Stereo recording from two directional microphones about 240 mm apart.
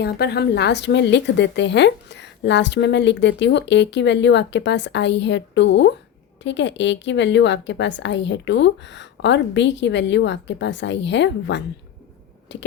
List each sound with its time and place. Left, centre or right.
0.0 s a woman's voice: left